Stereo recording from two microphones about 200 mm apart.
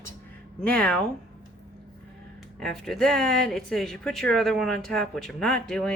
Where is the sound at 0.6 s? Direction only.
5° left (ahead or behind).